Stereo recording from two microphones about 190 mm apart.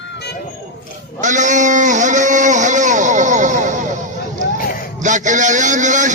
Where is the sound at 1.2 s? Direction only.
40° right (ahead or behind).